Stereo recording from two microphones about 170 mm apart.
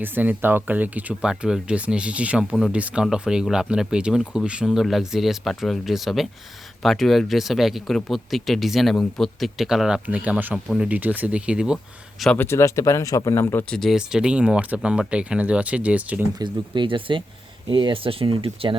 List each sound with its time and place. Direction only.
0.0 s speech: 10° right (ahead or behind)
12.2 s speech: 5° left (ahead or behind)
12.5 s speech: 15° left (ahead or behind)
13.7 s speech: centre (ahead or behind)
16.4 s speech: 30° right (ahead or behind)